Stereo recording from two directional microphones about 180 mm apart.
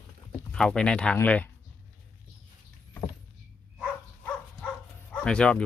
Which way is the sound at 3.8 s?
5° left (ahead or behind).